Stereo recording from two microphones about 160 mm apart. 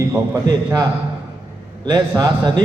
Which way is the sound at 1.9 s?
25° right (ahead or behind).